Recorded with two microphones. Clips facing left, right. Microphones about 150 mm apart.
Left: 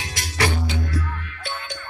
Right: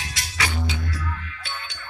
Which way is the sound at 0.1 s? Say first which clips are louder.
Left 6 dB; 50° left (ahead or behind).